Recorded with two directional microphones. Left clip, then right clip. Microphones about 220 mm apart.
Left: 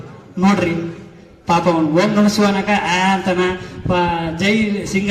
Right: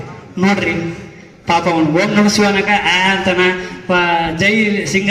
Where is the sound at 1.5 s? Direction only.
40° left (ahead or behind).